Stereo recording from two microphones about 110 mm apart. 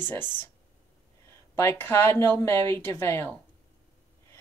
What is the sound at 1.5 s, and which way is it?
Speech, 20° left (ahead or behind).